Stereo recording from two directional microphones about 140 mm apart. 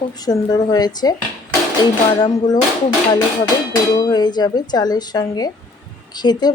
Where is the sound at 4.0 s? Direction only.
30° left (ahead or behind).